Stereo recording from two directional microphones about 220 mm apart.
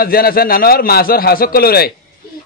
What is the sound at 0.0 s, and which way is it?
A man's voice, 45° left (ahead or behind).